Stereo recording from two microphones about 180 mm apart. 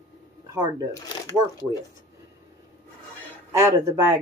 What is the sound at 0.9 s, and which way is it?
Speech, 20° left (ahead or behind).